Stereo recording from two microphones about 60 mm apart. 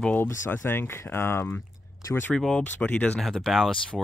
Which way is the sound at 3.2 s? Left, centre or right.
Centre.